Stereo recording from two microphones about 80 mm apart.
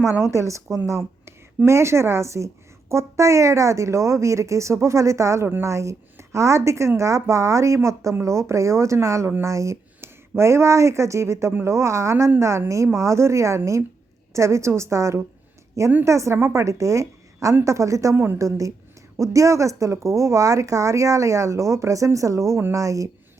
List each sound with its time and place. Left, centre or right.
0.2 s a woman's voice: right